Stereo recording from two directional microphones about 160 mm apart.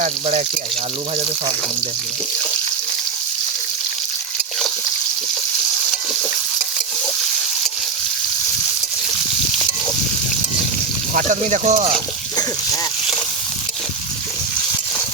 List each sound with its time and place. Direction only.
0.0 s speech: 45° right (ahead or behind)
11.1 s speech: 50° right (ahead or behind)